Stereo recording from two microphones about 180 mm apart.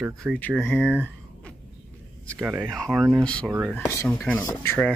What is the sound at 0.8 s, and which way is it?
Speech, 10° right (ahead or behind).